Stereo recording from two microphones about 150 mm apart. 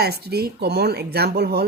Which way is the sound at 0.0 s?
90° right.